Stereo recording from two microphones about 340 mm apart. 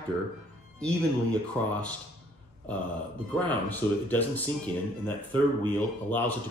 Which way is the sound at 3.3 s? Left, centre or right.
Centre.